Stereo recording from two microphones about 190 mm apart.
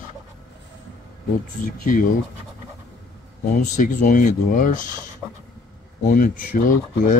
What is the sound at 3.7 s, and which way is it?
Speech, 45° left (ahead or behind).